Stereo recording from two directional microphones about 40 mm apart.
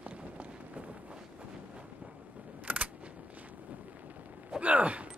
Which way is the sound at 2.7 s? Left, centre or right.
Right.